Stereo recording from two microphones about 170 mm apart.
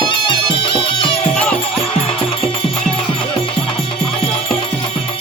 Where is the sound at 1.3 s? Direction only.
5° left (ahead or behind).